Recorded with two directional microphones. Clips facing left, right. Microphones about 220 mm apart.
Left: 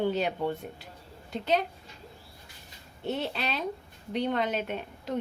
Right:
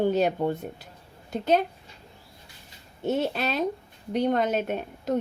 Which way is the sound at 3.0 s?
45° right (ahead or behind).